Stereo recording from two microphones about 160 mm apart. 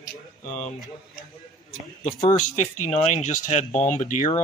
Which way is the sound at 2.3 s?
50° left (ahead or behind).